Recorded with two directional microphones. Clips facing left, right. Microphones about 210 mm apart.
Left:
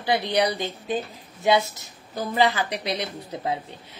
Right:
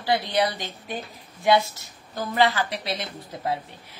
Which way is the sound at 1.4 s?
20° left (ahead or behind).